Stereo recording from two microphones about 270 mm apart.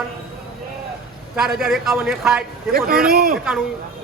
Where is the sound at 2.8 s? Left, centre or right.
Right.